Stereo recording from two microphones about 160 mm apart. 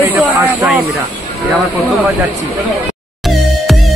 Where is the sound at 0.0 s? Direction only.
10° right (ahead or behind).